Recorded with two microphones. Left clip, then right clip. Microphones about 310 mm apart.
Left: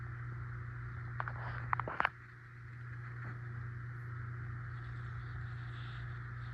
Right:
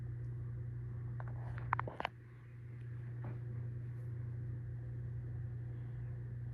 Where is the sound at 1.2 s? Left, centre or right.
Right.